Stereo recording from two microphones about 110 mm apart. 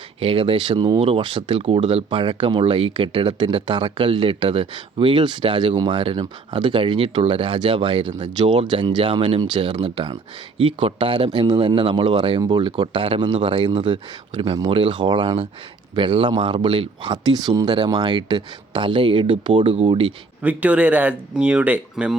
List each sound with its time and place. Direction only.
0.2 s speech: 55° right (ahead or behind)
2.0 s speech: 45° right (ahead or behind)
19.5 s speech: 85° right
19.9 s speech: 55° right (ahead or behind)
20.4 s speech: 15° right (ahead or behind)